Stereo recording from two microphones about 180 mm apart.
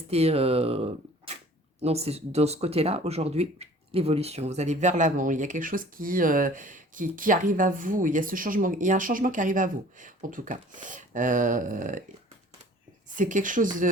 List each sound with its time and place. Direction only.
0.1 s speech: 35° right (ahead or behind)
13.1 s speech: 45° right (ahead or behind)